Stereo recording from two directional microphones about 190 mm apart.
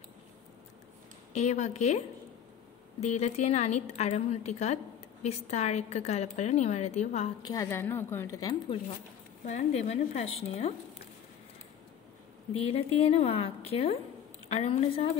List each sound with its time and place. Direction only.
1.3 s a woman's voice: 35° left (ahead or behind)
3.0 s a woman's voice: 35° left (ahead or behind)
7.4 s a woman's voice: 15° left (ahead or behind)
9.4 s a woman's voice: 40° left (ahead or behind)
12.5 s a woman's voice: 30° left (ahead or behind)